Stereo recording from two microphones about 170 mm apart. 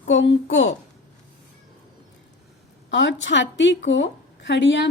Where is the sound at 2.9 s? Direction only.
90° left.